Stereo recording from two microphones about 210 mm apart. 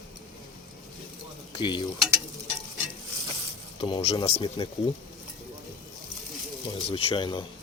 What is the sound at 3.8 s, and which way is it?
Speech, 25° left (ahead or behind).